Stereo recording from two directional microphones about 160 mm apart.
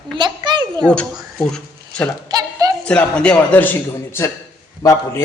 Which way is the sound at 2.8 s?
5° left (ahead or behind).